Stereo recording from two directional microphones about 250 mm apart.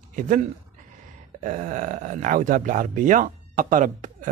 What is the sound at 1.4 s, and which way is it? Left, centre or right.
Speech, right.